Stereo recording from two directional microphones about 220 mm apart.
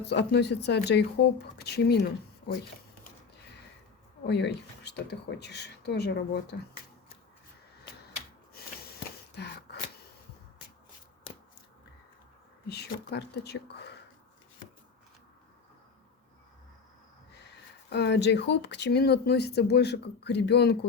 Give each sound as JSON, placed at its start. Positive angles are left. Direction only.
{"t": 0.1, "sound": "speech", "side_deg": 50}
{"t": 4.3, "sound": "speech", "side_deg": 50}
{"t": 12.6, "sound": "speech", "side_deg": 50}
{"t": 17.8, "sound": "speech", "side_deg": 50}